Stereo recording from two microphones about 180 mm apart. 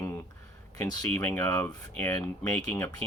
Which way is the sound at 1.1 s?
15° left (ahead or behind).